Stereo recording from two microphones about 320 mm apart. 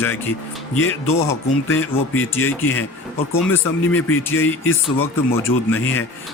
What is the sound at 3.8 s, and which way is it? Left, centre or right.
Speech, left.